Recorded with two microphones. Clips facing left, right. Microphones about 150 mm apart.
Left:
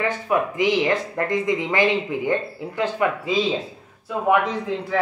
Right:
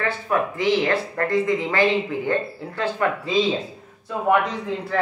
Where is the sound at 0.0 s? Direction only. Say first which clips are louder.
Left 1 dB; 15° left (ahead or behind).